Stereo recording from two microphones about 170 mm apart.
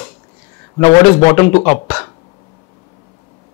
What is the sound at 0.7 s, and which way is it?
Speech, 20° left (ahead or behind).